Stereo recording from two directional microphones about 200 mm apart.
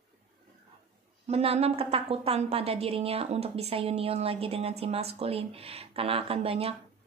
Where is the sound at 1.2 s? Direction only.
30° right (ahead or behind).